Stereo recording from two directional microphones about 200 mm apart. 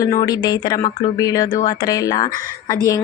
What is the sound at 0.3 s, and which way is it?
Speech, 20° left (ahead or behind).